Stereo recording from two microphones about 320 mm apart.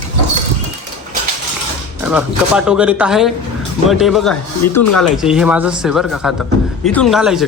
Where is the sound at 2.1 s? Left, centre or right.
Centre.